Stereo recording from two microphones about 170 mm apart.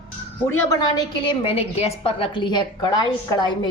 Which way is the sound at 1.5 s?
35° left (ahead or behind).